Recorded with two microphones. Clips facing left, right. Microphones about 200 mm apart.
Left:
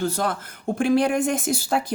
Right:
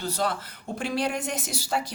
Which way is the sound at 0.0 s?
50° left (ahead or behind).